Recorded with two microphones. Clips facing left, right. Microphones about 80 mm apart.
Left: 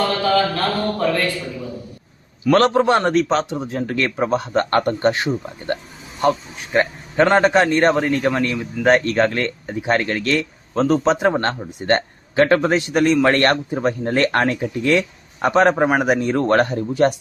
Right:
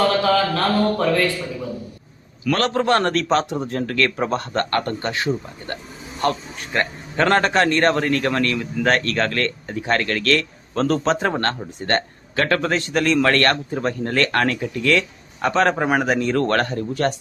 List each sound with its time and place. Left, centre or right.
0.3 s a sound: centre
2.4 s a man's voice: left
2.7 s speech: centre
3.2 s a sound: centre
3.8 s speech: centre
4.2 s a sound: centre
4.8 s speech: left
6.2 s speech: centre
16.0 s speech: centre